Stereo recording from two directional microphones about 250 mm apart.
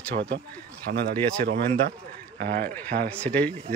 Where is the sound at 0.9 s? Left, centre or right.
Right.